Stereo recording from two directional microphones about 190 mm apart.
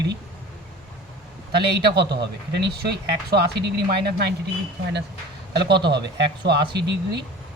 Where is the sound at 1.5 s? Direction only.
60° right (ahead or behind).